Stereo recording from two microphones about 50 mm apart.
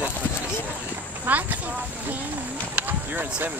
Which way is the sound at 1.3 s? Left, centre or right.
Right.